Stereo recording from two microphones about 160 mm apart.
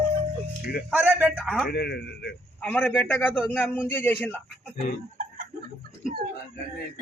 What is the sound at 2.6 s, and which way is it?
A man's voice, 10° left (ahead or behind).